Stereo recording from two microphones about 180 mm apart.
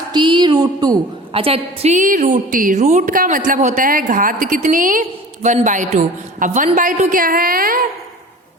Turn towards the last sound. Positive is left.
turn(degrees=-50)  # may be behind; listen again after turning